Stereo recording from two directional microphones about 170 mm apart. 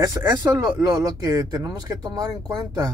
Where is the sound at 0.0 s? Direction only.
20° right (ahead or behind).